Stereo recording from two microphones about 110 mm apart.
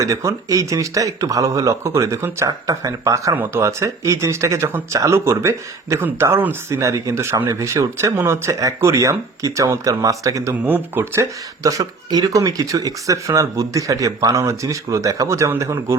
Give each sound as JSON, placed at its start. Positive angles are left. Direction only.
{"t": 0.0, "sound": "speech", "side_deg": -30}
{"t": 10.5, "sound": "speech", "side_deg": -15}